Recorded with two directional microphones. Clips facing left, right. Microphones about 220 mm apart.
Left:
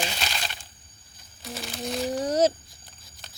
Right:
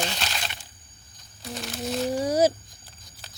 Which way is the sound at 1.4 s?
Centre (ahead or behind).